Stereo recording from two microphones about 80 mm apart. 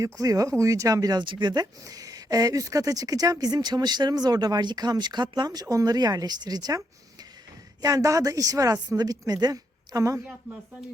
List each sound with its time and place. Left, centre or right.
0.0 s speech: right
1.2 s speech: right
1.8 s speech: right